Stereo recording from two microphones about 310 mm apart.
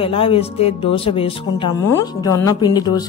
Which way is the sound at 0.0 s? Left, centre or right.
Centre.